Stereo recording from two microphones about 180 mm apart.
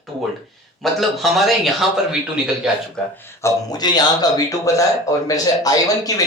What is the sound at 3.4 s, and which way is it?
Speech, 20° left (ahead or behind).